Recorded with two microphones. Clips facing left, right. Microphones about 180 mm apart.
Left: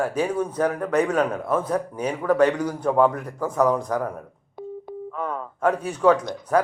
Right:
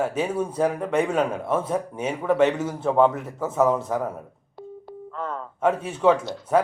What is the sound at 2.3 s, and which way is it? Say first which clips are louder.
Speech: left 1 dB; 25° right (ahead or behind).